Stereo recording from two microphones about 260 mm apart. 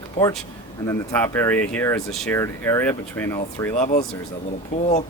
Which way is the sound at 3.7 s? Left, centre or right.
Left.